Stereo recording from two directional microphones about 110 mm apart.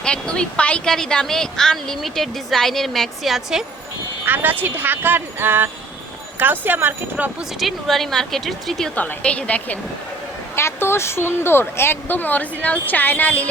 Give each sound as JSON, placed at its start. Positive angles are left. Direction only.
{"t": 0.0, "sound": "speech", "side_deg": 10}
{"t": 4.3, "sound": "speech", "side_deg": -15}
{"t": 7.6, "sound": "speech", "side_deg": 0}
{"t": 9.0, "sound": "a woman's voice", "side_deg": 15}
{"t": 10.5, "sound": "speech", "side_deg": 25}